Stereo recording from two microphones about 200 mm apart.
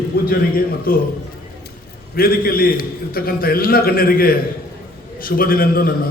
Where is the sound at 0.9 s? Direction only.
45° left (ahead or behind).